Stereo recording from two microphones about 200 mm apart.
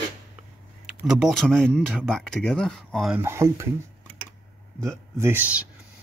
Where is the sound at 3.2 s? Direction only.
15° right (ahead or behind).